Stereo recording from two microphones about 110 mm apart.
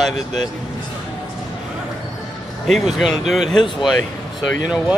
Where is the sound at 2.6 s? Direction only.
Centre (ahead or behind).